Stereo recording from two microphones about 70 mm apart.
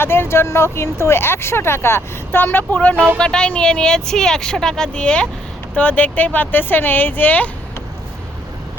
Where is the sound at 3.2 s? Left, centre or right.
Centre.